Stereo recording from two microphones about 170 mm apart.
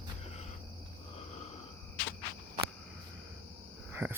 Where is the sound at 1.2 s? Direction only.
40° left (ahead or behind).